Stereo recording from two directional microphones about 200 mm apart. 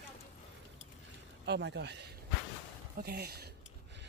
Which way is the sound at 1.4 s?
60° right (ahead or behind).